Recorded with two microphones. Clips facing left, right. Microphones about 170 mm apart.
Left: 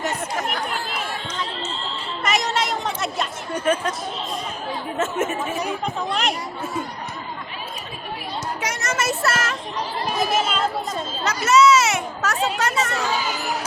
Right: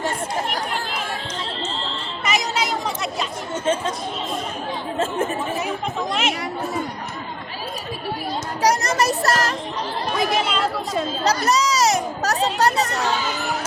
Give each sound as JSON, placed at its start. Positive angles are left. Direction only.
{"t": 2.2, "sound": "chatter", "side_deg": 0}
{"t": 3.5, "sound": "speech", "side_deg": -25}
{"t": 4.9, "sound": "a child's voice", "side_deg": -35}
{"t": 8.6, "sound": "a child's voice", "side_deg": -35}
{"t": 10.1, "sound": "chatter", "side_deg": 5}
{"t": 11.2, "sound": "a child's voice", "side_deg": -35}